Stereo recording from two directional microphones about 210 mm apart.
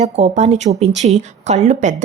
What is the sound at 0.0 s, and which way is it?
Speech, 30° right (ahead or behind).